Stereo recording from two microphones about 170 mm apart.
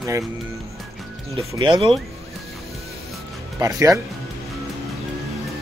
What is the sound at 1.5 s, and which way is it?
Speech, 25° right (ahead or behind).